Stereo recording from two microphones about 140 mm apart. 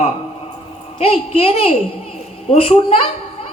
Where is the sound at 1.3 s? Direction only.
45° left (ahead or behind).